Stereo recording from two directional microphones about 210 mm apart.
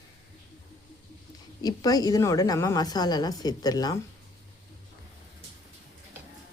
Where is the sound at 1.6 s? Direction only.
20° left (ahead or behind).